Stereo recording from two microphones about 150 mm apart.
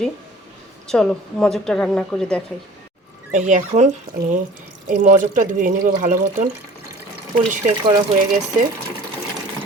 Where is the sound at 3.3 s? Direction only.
55° right (ahead or behind).